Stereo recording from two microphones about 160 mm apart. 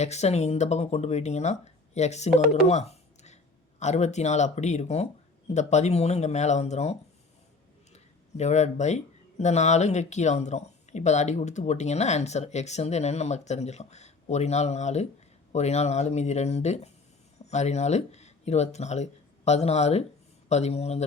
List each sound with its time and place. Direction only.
0.0 s speech: 45° left (ahead or behind)
7.9 s a sound: 45° left (ahead or behind)
9.4 s speech: 45° left (ahead or behind)